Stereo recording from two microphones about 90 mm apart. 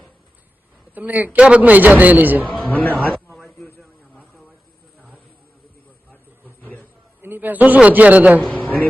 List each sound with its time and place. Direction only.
0.9 s a man's voice: 20° right (ahead or behind)
2.6 s speech: 20° left (ahead or behind)
6.1 s a sound: 20° left (ahead or behind)
7.2 s a man's voice: 20° right (ahead or behind)
8.4 s a man's voice: 15° left (ahead or behind)